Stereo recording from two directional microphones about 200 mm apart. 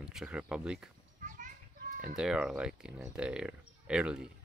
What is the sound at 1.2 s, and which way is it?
Children playing, 40° right (ahead or behind).